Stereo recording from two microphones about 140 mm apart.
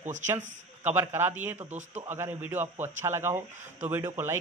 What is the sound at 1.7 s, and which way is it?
Speech, 55° right (ahead or behind).